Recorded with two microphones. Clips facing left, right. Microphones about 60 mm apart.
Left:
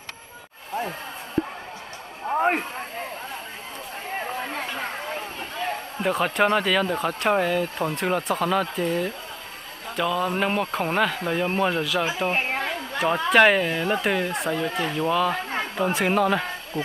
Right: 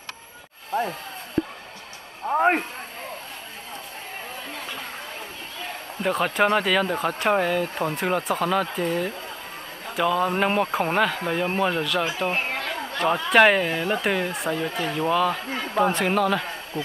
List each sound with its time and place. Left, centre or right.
2.2 s speech: centre
6.0 s speech: centre
12.3 s chatter: centre
13.3 s speech: centre